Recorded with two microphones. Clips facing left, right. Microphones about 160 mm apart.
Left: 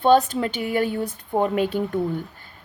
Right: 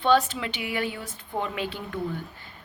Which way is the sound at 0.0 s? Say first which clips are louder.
Left 5 dB; 45° left (ahead or behind).